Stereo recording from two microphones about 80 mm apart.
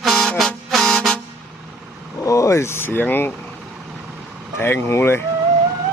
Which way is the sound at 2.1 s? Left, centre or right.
Left.